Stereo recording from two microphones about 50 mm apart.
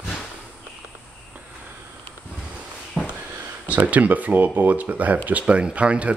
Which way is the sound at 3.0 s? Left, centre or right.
Centre.